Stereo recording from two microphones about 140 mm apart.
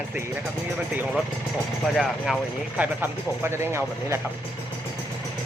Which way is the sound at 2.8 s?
15° right (ahead or behind).